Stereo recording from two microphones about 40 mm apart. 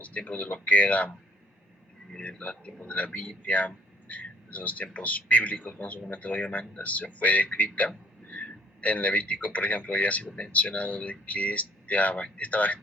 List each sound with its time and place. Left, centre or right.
0.0 s a man's voice: left
2.4 s a man's voice: left